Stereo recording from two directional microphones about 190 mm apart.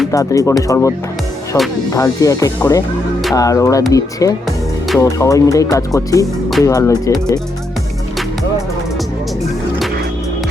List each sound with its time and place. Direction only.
0.1 s speech: 15° left (ahead or behind)
1.5 s speech: 5° left (ahead or behind)
1.9 s speech: 20° left (ahead or behind)